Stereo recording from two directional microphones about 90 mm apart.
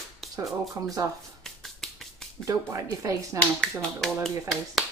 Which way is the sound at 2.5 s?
50° right (ahead or behind).